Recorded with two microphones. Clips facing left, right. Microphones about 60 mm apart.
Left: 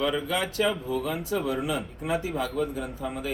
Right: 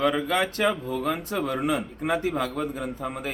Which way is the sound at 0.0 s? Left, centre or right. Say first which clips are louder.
Right 3 dB; right.